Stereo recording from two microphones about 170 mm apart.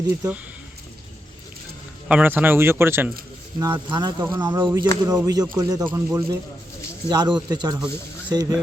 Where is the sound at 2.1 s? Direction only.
10° right (ahead or behind).